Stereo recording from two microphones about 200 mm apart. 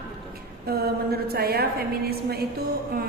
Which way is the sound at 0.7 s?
50° right (ahead or behind).